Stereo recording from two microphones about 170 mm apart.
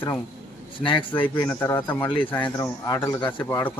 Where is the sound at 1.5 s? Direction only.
15° left (ahead or behind).